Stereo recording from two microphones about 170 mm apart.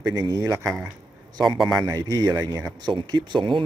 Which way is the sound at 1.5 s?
Centre (ahead or behind).